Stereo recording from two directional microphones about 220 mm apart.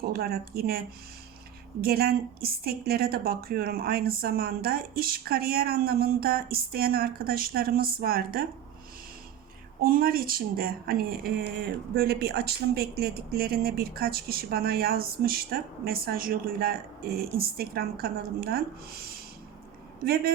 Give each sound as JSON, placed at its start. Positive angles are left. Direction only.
{"t": 0.0, "sound": "a woman's voice", "side_deg": -45}
{"t": 9.8, "sound": "a woman's voice", "side_deg": -40}